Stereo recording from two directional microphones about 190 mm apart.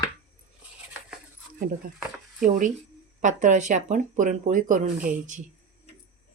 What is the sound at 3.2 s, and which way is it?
Speech, 40° right (ahead or behind).